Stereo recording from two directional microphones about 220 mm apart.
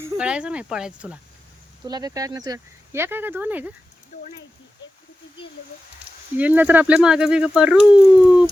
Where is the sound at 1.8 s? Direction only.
15° right (ahead or behind).